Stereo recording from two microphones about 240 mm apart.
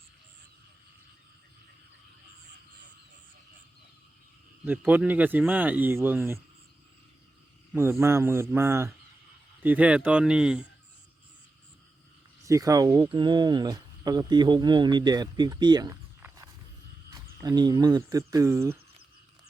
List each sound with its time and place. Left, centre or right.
4.6 s speech: centre
7.7 s speech: centre
12.5 s speech: centre